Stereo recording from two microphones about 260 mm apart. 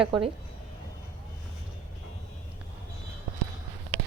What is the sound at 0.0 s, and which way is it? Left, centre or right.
Speech, centre.